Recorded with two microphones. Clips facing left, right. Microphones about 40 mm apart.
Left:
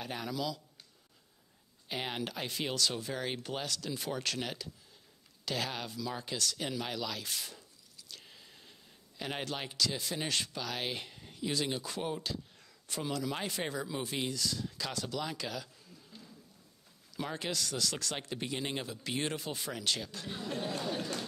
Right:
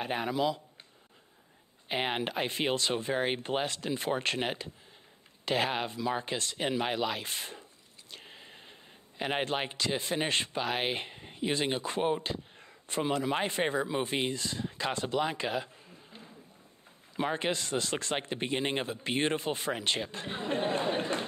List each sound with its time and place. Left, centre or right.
0.0 s speech: right
1.9 s speech: right
8.1 s a sound: right
9.2 s speech: right